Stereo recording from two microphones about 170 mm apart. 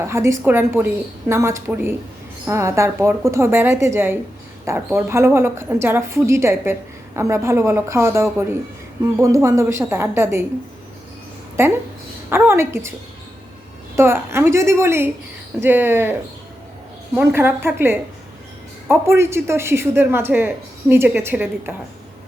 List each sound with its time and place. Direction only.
0.0 s a woman's voice: 15° right (ahead or behind)
11.6 s a woman's voice: 15° right (ahead or behind)
13.9 s a woman's voice: 15° right (ahead or behind)
17.2 s a woman's voice: 15° right (ahead or behind)